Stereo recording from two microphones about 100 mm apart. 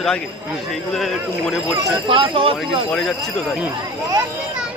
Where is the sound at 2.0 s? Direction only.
60° right (ahead or behind).